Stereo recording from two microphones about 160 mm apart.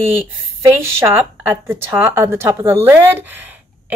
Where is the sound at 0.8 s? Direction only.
15° right (ahead or behind).